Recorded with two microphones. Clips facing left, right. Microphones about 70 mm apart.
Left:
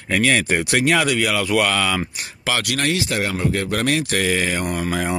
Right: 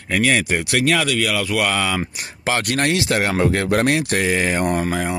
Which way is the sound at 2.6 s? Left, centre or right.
Right.